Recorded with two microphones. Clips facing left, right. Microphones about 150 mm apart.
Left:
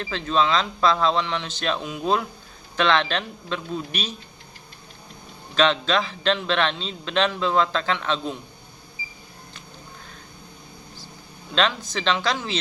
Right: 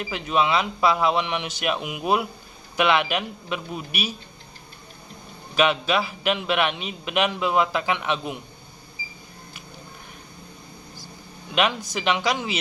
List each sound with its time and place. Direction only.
0.0 s a man's voice: 15° right (ahead or behind)
5.5 s a man's voice: 10° right (ahead or behind)
11.5 s a man's voice: 10° right (ahead or behind)